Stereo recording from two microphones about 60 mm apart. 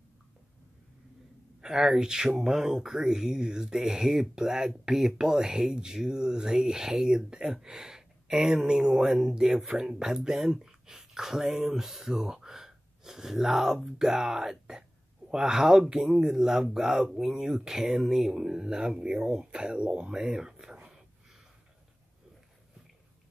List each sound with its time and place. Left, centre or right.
1.6 s speech: centre